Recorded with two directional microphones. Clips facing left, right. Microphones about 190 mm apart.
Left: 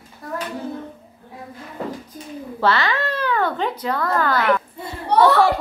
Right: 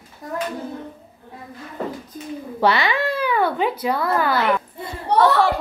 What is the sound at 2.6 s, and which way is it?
A child's voice, 15° right (ahead or behind).